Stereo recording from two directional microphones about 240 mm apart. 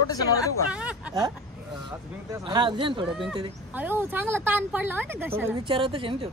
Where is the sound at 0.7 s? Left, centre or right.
Centre.